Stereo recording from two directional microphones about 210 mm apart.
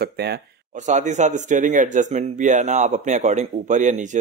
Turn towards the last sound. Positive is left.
turn(degrees=-35)  # may be behind; listen again after turning